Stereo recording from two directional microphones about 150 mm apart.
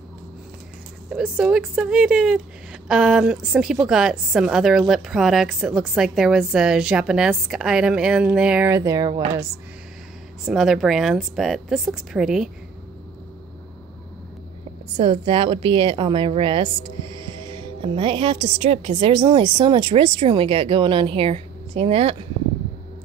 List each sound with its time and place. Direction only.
1.1 s a woman's voice: 10° right (ahead or behind)
8.7 s speech: 25° right (ahead or behind)
10.4 s a woman's voice: 5° right (ahead or behind)
15.0 s a woman's voice: 35° right (ahead or behind)